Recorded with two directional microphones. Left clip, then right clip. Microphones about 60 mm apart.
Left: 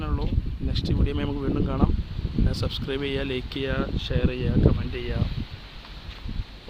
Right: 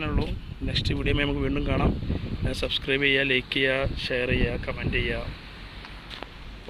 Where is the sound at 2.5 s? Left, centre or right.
Left.